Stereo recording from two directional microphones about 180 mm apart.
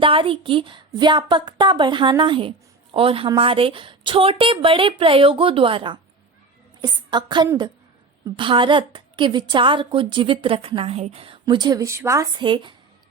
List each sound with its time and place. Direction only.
0.0 s a woman's voice: 30° right (ahead or behind)
12.4 s a woman's voice: 25° right (ahead or behind)